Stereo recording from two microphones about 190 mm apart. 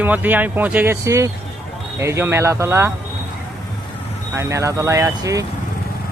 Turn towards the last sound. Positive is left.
turn(degrees=-15)  # may be behind; listen again after turning